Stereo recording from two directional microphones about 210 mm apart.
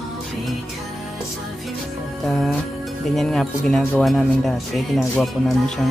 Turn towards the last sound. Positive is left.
turn(degrees=0)  # may be behind; listen again after turning